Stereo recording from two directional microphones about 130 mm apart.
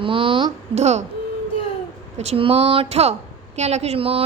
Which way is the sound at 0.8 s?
55° right (ahead or behind).